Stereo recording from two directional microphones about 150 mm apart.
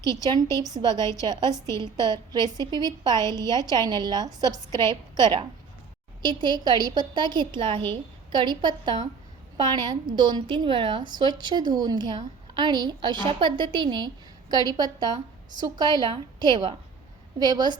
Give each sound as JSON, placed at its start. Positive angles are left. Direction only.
{"t": 0.0, "sound": "a woman's voice", "side_deg": -25}
{"t": 1.5, "sound": "a woman's voice", "side_deg": 20}
{"t": 1.8, "sound": "a woman's voice", "side_deg": -30}